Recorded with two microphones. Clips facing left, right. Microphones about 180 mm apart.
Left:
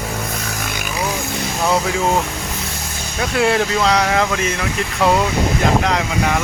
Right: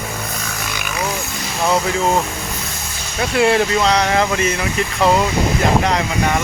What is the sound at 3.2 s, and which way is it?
Speech, centre (ahead or behind).